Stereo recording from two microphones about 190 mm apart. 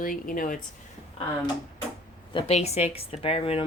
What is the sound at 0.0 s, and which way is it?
Speech, 45° left (ahead or behind).